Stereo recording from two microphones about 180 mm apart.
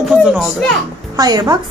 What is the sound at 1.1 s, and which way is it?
Speech, 20° right (ahead or behind).